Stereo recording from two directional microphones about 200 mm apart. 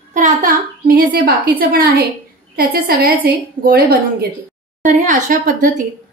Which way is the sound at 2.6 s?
45° right (ahead or behind).